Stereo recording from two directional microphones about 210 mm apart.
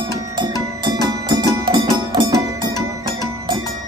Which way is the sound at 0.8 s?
15° right (ahead or behind).